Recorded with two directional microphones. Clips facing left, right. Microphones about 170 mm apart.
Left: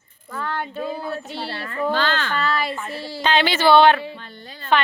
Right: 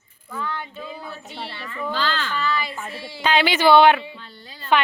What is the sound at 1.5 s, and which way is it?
Speech, 55° left (ahead or behind).